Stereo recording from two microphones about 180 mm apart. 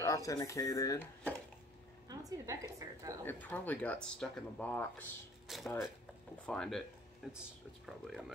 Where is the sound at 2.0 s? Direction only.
20° right (ahead or behind).